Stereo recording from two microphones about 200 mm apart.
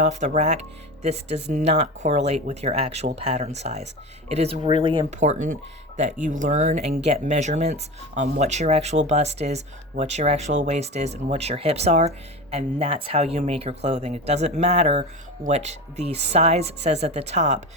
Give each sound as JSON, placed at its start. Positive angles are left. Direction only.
{"t": 0.1, "sound": "speech", "side_deg": -35}
{"t": 5.1, "sound": "speech", "side_deg": -35}